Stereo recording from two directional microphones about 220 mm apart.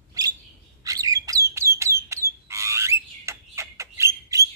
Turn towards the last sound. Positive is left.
turn(degrees=-15)  # may be behind; listen again after turning